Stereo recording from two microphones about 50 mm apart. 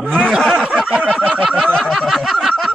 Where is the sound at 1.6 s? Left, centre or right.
Centre.